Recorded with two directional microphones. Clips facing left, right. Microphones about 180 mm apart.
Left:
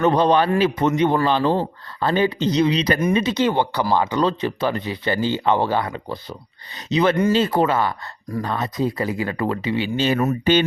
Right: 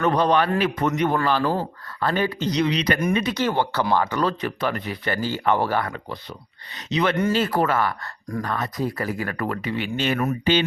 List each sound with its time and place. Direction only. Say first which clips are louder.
0.0 s a man's voice: left 3 dB; 25° left (ahead or behind)
6.9 s speech: left 4 dB; 35° left (ahead or behind)
7.3 s a man's voice: left 3 dB; 20° left (ahead or behind)
10.4 s speech: left 3 dB; 50° left (ahead or behind)